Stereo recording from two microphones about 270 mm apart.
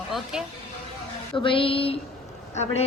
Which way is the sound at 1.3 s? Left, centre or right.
Centre.